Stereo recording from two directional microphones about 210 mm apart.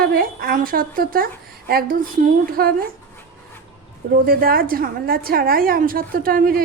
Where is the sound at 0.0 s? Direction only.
45° right (ahead or behind).